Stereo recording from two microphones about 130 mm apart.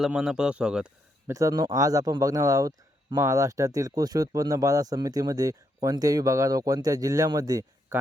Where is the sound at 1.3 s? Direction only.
25° right (ahead or behind).